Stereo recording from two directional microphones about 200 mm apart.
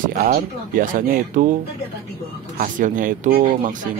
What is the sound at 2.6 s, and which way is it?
Speech, 40° right (ahead or behind).